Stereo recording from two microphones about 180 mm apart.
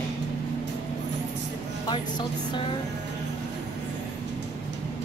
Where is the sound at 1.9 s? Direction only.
25° left (ahead or behind).